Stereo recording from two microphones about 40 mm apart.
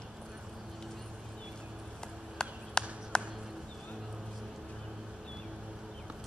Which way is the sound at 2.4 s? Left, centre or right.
Left.